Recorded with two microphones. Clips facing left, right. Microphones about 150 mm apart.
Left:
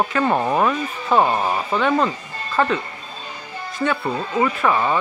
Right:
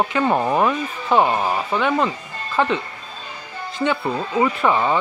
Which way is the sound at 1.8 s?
10° right (ahead or behind).